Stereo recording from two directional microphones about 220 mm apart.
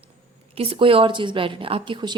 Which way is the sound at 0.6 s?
25° right (ahead or behind).